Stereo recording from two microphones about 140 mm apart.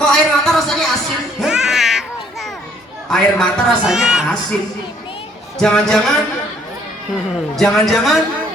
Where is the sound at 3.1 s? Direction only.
5° left (ahead or behind).